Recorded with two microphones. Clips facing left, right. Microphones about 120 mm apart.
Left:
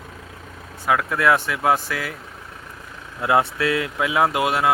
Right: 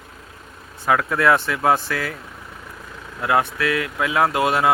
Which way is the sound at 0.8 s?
5° left (ahead or behind).